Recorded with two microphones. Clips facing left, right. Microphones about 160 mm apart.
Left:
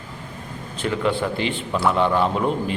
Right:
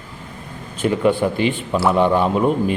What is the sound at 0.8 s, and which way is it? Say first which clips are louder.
A man's voice: right 5 dB; 15° right (ahead or behind).